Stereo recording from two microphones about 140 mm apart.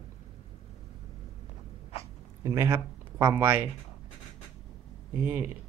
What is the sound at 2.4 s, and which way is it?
Speech, 20° right (ahead or behind).